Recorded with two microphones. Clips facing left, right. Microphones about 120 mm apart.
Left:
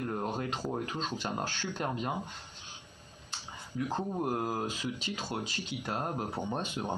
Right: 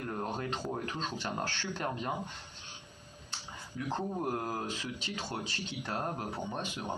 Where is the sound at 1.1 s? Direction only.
15° left (ahead or behind).